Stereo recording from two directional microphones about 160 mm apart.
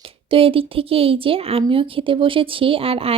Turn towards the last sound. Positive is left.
turn(degrees=-35)  # may be behind; listen again after turning